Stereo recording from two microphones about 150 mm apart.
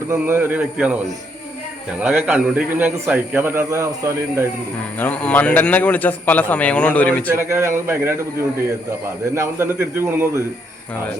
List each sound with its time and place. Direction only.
0.1 s a man's voice: 15° right (ahead or behind)
4.9 s a man's voice: 10° left (ahead or behind)
7.3 s a man's voice: 15° right (ahead or behind)